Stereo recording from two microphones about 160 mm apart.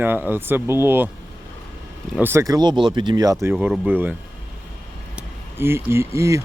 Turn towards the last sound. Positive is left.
turn(degrees=-20)  # may be behind; listen again after turning